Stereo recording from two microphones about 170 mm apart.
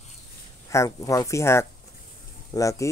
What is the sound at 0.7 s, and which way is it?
Speech, 20° left (ahead or behind).